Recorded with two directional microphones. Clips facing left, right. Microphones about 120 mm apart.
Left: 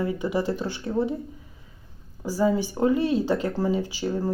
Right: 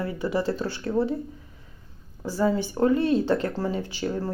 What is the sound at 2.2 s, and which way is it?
Speech, 10° left (ahead or behind).